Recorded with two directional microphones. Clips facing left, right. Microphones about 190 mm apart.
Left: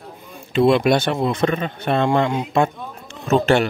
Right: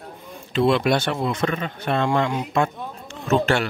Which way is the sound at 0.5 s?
15° left (ahead or behind).